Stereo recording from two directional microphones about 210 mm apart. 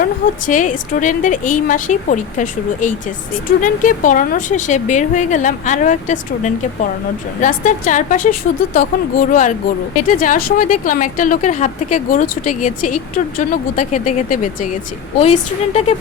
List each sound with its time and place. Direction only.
0.4 s a woman's voice: 40° left (ahead or behind)